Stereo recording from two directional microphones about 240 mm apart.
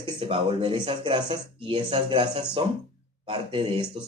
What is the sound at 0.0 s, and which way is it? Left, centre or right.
Speech, right.